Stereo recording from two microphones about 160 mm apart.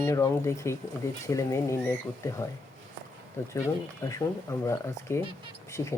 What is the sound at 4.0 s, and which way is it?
Speech, 20° left (ahead or behind).